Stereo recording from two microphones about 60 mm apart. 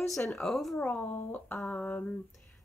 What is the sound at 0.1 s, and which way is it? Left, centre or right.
Speech, centre.